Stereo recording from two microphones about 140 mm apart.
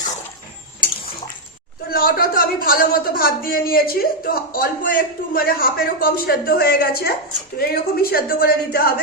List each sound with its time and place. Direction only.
1.9 s a woman's voice: 90° left